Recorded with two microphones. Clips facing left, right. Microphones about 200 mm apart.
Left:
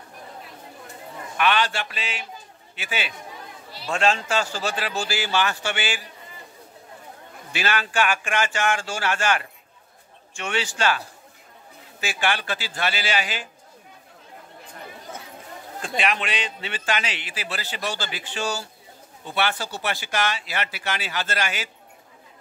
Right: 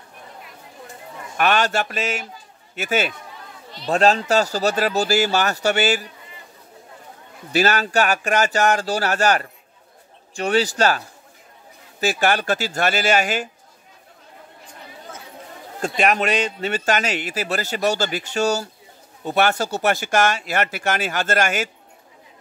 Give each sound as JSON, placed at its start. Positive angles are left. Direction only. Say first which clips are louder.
{"t": 1.3, "sound": "a man's voice", "louder": "right 3 dB", "side_deg": -45}
{"t": 7.5, "sound": "speech", "louder": "right 6 dB", "side_deg": -40}
{"t": 12.0, "sound": "a man's voice", "louder": "right 6 dB", "side_deg": -40}
{"t": 16.0, "sound": "a man's voice", "louder": "right 7 dB", "side_deg": -45}